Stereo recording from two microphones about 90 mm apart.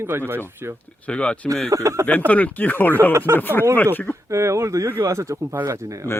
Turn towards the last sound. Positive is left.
turn(degrees=-35)  # may be behind; listen again after turning